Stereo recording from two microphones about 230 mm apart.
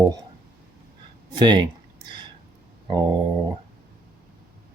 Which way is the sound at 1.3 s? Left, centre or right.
Centre.